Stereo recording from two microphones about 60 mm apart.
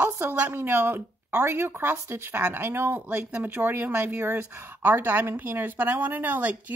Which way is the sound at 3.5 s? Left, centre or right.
Right.